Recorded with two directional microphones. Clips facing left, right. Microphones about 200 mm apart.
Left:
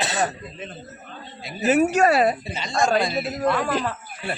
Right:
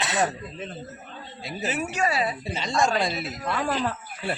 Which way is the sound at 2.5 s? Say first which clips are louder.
Right 1 dB; 30° right (ahead or behind).